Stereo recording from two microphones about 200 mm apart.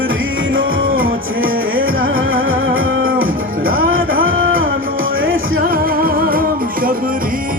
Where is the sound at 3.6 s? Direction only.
45° right (ahead or behind).